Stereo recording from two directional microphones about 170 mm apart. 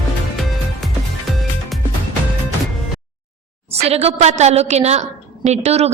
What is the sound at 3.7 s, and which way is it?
A woman's voice, 40° right (ahead or behind).